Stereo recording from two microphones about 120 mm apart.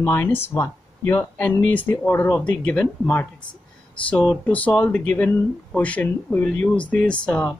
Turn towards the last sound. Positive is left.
turn(degrees=10)  # may be behind; listen again after turning